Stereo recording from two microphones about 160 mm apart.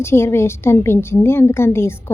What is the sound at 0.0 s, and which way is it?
A woman's voice, 15° left (ahead or behind).